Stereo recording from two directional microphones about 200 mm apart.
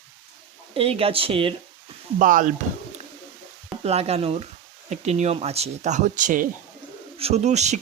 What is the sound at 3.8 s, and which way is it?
Speech, 30° right (ahead or behind).